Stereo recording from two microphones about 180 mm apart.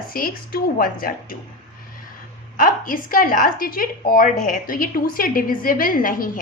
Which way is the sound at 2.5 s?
50° left (ahead or behind).